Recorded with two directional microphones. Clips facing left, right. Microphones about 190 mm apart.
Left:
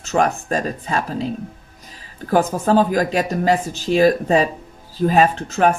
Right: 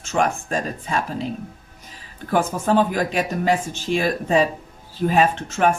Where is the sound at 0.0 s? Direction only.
40° left (ahead or behind).